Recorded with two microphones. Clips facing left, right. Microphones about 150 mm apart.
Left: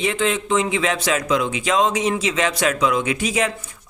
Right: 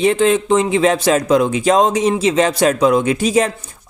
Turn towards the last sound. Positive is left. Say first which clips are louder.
# right 6 dB
turn(degrees=-35)  # may be behind; listen again after turning